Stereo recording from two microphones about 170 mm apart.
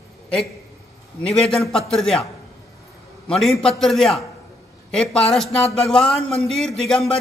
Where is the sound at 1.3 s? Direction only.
5° left (ahead or behind).